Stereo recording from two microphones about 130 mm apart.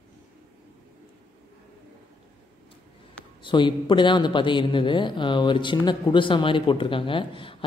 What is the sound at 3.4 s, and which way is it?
A man's voice, 40° left (ahead or behind).